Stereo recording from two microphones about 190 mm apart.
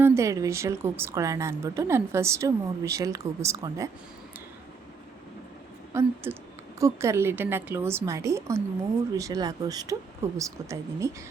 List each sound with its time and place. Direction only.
0.0 s a woman's voice: 15° right (ahead or behind)
5.9 s a woman's voice: 15° right (ahead or behind)